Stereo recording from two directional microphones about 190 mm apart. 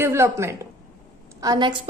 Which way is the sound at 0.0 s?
15° right (ahead or behind).